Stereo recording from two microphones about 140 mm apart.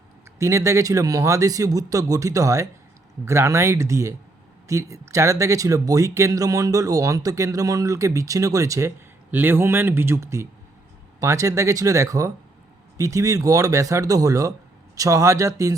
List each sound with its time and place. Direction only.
0.3 s speech: 20° right (ahead or behind)